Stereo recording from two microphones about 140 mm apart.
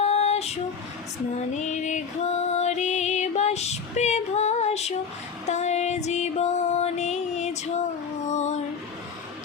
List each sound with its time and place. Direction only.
0.0 s female singing: 50° left (ahead or behind)
1.4 s music: 55° left (ahead or behind)